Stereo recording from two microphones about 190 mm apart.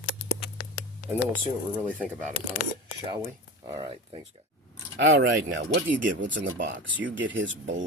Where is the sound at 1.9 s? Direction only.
5° left (ahead or behind).